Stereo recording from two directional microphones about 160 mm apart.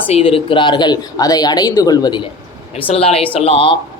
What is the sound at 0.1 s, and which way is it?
Speech, 40° left (ahead or behind).